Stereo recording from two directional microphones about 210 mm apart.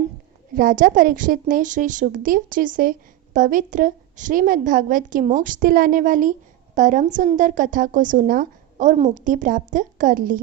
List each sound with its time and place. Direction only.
0.5 s a woman's voice: 40° right (ahead or behind)